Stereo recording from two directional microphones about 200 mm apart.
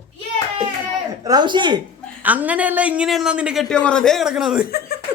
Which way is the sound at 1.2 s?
20° right (ahead or behind).